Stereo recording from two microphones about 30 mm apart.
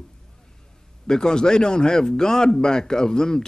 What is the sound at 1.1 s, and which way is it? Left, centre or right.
Speech, left.